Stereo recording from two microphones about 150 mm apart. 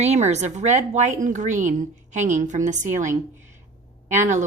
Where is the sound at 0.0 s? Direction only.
50° right (ahead or behind).